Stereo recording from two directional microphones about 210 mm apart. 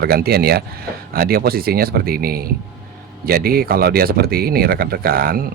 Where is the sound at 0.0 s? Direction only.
50° right (ahead or behind).